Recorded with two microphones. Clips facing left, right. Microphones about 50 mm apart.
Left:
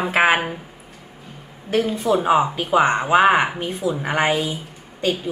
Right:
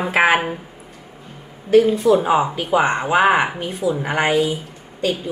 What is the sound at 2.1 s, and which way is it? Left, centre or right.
A woman's voice, centre.